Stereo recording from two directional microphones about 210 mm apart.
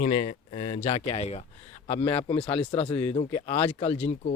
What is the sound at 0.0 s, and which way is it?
Speech, 30° left (ahead or behind).